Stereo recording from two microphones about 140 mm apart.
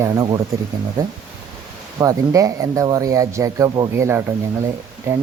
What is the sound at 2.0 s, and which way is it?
Speech, 25° right (ahead or behind).